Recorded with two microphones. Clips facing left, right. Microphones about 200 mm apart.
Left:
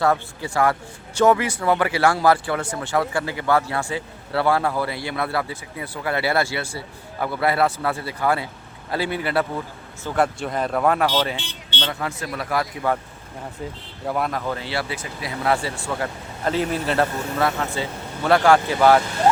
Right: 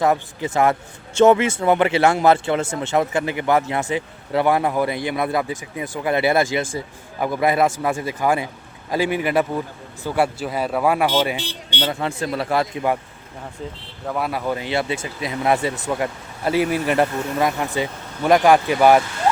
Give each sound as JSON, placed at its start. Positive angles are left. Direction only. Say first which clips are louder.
{"t": 0.0, "sound": "a man's voice", "louder": "right 2 dB", "side_deg": -20}
{"t": 11.9, "sound": "a man's voice", "louder": "right 5 dB", "side_deg": -25}
{"t": 14.3, "sound": "speech", "louder": "right 3 dB", "side_deg": -10}